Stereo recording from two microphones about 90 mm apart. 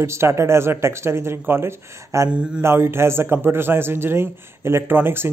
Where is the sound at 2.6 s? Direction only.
25° right (ahead or behind).